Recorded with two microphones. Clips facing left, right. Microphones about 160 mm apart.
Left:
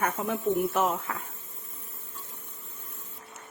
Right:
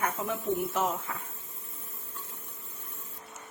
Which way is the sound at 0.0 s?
60° left (ahead or behind).